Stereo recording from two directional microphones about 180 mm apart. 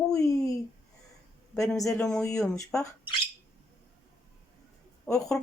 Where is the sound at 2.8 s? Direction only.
25° left (ahead or behind).